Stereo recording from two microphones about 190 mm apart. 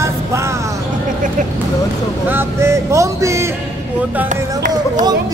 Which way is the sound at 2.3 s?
15° right (ahead or behind).